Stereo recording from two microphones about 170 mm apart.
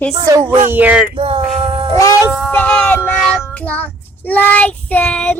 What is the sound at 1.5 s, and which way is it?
Cat, 35° right (ahead or behind).